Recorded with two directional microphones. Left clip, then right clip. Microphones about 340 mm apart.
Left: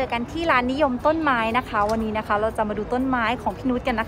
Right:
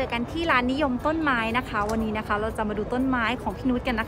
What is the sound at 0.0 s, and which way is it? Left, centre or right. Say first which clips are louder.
A woman's voice: left 3 dB; centre.